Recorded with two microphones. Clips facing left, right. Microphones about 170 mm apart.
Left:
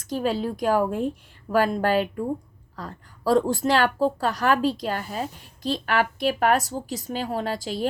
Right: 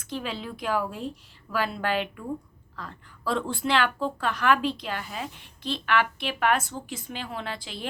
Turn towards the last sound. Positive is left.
turn(degrees=40)  # may be behind; listen again after turning